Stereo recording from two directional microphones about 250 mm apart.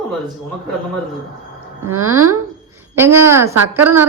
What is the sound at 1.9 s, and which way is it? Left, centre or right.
Speech, right.